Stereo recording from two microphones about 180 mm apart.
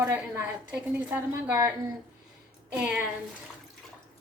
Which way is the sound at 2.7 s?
5° right (ahead or behind).